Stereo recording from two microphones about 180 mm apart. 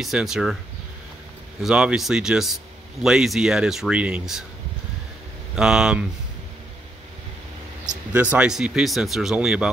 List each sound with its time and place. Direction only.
0.0 s speech: centre (ahead or behind)
1.6 s speech: 5° right (ahead or behind)
5.6 s speech: 5° right (ahead or behind)
8.1 s speech: 10° right (ahead or behind)